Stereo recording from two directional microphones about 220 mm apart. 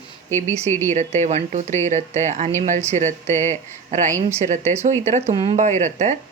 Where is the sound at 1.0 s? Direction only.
30° right (ahead or behind).